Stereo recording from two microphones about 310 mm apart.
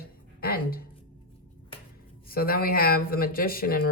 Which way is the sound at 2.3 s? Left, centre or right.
Left.